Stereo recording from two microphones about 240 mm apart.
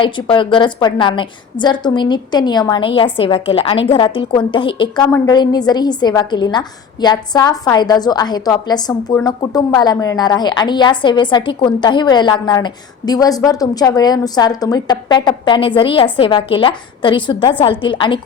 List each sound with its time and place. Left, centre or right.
0.0 s a woman's voice: left